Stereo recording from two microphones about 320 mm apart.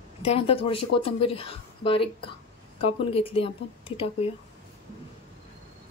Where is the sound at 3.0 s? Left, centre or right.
Centre.